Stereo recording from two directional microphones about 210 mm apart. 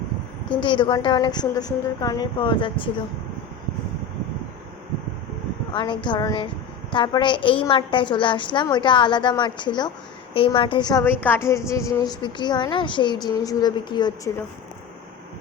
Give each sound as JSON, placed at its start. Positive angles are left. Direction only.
{"t": 0.5, "sound": "a woman's voice", "side_deg": 25}
{"t": 5.7, "sound": "a woman's voice", "side_deg": 20}